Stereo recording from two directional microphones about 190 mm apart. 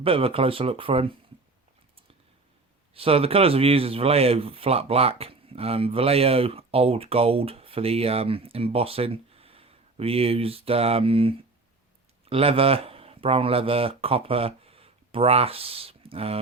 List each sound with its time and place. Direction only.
0.0 s speech: 30° right (ahead or behind)
2.9 s speech: 30° right (ahead or behind)